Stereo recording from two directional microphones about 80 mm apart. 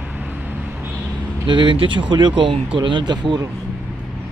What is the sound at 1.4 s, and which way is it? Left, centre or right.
Speech, right.